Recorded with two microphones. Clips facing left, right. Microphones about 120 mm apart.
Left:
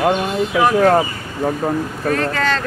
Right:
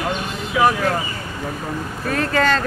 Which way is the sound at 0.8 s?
45° left (ahead or behind).